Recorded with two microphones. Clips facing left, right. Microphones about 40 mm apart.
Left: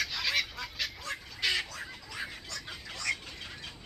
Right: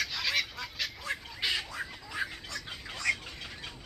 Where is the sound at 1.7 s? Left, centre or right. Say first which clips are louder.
Right 4 dB; right.